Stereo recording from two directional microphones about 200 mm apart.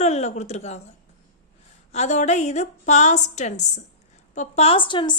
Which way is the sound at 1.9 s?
35° left (ahead or behind).